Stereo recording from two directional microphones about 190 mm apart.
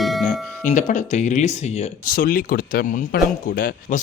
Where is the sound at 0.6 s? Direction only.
40° left (ahead or behind).